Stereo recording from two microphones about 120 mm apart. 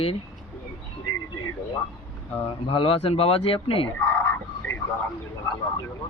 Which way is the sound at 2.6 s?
50° left (ahead or behind).